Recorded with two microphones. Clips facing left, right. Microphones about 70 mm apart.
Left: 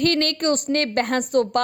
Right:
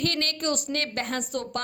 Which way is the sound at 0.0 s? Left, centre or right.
Left.